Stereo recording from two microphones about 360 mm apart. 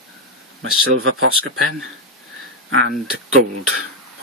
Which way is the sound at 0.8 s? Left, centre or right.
Right.